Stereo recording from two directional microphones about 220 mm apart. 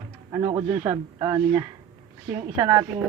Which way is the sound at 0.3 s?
15° right (ahead or behind).